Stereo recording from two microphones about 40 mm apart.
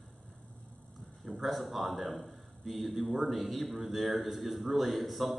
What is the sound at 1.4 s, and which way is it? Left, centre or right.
A man's voice, centre.